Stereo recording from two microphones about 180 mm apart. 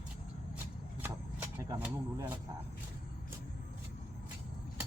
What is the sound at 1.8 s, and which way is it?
Speech, 10° right (ahead or behind).